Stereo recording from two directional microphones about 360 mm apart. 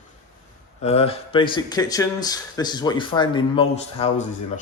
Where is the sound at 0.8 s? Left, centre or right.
Centre.